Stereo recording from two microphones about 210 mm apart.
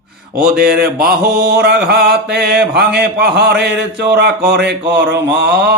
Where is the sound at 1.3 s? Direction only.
50° right (ahead or behind).